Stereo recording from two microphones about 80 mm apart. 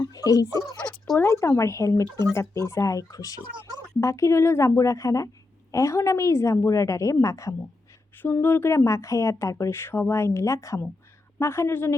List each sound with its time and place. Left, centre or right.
0.0 s a sound: left
1.2 s speech: left
8.2 s speech: left